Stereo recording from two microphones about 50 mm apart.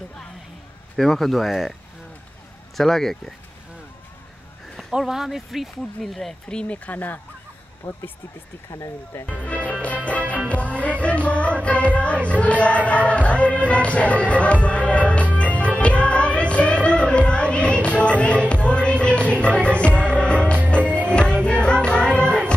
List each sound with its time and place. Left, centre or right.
0.9 s speech: centre
2.8 s speech: centre
4.9 s speech: centre
6.5 s music: left
7.8 s speech: left
8.6 s speech: left
9.2 s music: left